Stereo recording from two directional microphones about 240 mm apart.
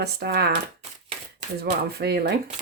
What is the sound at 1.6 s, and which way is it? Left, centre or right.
Speech, right.